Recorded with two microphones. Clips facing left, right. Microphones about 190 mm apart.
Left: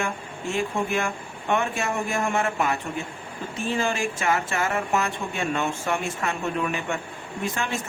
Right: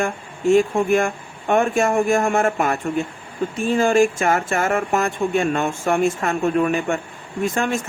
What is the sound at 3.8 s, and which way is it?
Speech, 45° right (ahead or behind).